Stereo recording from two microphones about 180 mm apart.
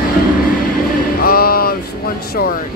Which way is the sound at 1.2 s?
60° left (ahead or behind).